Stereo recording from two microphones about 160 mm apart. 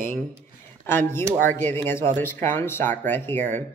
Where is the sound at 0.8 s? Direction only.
15° left (ahead or behind).